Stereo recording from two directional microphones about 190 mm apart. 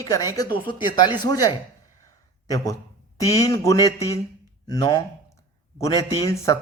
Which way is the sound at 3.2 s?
15° left (ahead or behind).